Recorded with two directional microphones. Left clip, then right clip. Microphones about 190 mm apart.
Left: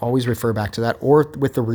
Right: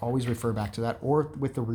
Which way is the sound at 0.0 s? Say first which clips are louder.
Left 9 dB; 40° left (ahead or behind).